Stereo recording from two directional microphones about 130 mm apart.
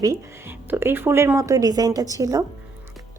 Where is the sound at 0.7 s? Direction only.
15° right (ahead or behind).